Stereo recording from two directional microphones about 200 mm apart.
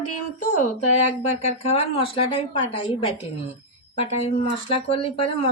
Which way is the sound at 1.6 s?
30° left (ahead or behind).